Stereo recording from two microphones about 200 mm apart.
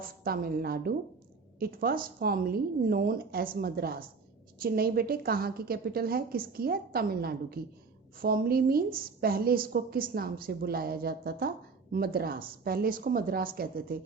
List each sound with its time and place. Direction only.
0.3 s a woman's voice: 50° right (ahead or behind)